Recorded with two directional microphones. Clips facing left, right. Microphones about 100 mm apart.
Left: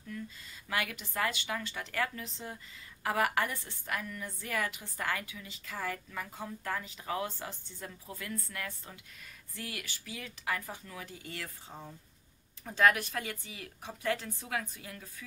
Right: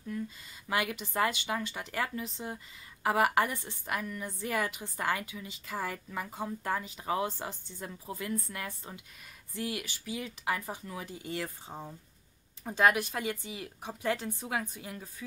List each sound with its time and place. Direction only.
0.7 s a woman's voice: 20° right (ahead or behind)